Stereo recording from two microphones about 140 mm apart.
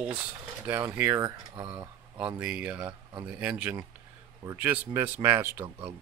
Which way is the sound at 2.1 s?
10° right (ahead or behind).